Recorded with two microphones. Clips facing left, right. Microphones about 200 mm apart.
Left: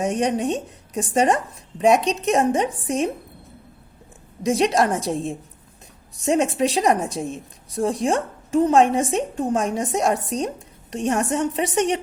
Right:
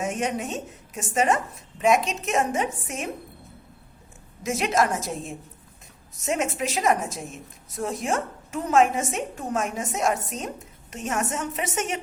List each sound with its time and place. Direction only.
0.0 s a woman's voice: 35° left (ahead or behind)
4.4 s a woman's voice: 35° left (ahead or behind)